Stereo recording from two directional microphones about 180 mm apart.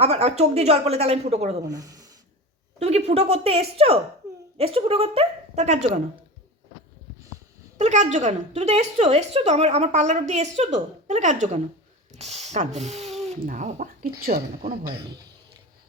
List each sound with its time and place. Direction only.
0.0 s a woman's voice: 35° right (ahead or behind)
1.6 s speech: 20° right (ahead or behind)
2.7 s a woman's voice: 35° right (ahead or behind)
7.8 s a woman's voice: 40° right (ahead or behind)